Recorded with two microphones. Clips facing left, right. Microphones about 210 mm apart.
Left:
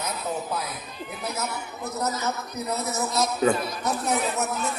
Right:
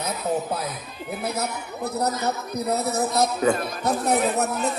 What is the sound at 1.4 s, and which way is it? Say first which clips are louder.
Speech: right 3 dB; 35° right (ahead or behind).